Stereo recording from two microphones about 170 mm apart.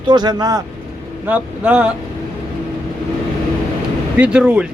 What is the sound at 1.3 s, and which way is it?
Speech, 10° right (ahead or behind).